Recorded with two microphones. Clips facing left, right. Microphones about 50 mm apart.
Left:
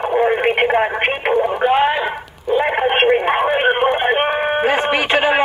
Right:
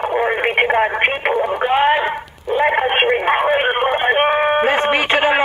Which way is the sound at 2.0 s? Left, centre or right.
Centre.